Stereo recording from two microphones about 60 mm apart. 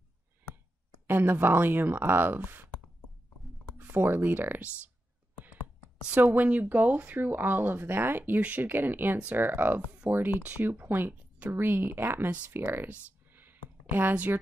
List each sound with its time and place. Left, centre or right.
1.0 s speech: right
3.7 s speech: right
6.0 s speech: right
8.4 s speech: right
10.4 s speech: right
11.5 s speech: right
13.3 s a sound: right
14.1 s speech: right